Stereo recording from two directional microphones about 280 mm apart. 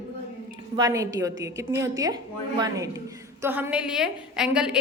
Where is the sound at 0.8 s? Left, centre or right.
Centre.